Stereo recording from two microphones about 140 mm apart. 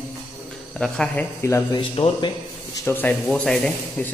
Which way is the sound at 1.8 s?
35° left (ahead or behind).